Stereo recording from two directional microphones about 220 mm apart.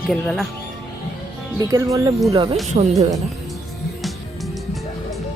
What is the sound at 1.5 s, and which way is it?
Speech, 15° right (ahead or behind).